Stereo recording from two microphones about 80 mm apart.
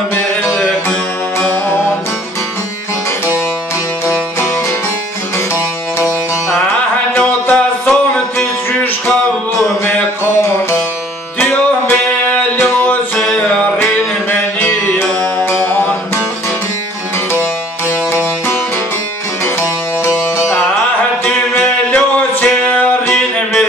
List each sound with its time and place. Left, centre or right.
7.2 s a sound: centre
11.3 s music: left
15.3 s music: left
20.0 s music: left